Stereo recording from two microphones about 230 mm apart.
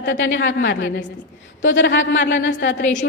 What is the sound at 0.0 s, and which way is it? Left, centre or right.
Speech, left.